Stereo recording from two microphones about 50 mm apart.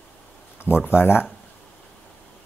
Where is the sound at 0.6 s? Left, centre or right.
Left.